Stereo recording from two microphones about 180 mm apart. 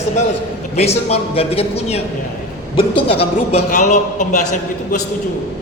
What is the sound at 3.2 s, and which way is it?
A man's voice, 40° left (ahead or behind).